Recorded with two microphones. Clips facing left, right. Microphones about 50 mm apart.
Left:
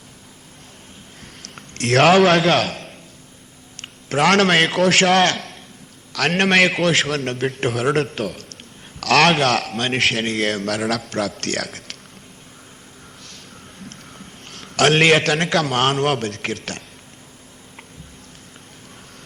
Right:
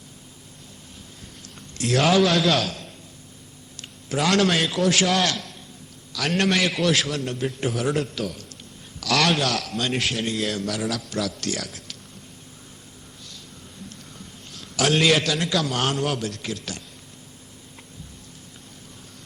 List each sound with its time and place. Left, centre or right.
1.2 s a sound: left
3.8 s a man's voice: left
13.9 s a man's voice: left